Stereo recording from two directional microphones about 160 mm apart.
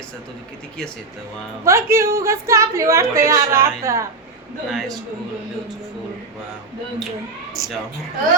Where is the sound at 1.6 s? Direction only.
15° right (ahead or behind).